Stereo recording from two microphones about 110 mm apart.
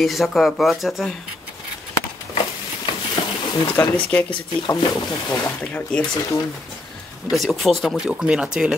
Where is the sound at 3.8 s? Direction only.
20° left (ahead or behind).